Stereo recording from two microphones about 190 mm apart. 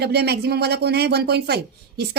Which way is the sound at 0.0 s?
60° right (ahead or behind).